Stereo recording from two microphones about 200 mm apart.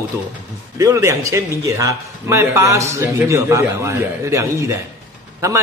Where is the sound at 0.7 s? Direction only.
15° right (ahead or behind).